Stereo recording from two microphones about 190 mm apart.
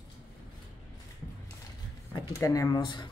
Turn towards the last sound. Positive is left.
turn(degrees=20)  # may be behind; listen again after turning